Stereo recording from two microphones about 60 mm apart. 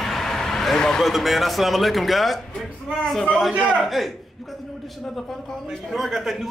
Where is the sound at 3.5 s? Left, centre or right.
Right.